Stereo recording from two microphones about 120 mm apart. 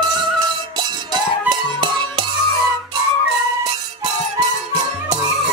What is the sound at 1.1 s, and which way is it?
Music, 40° right (ahead or behind).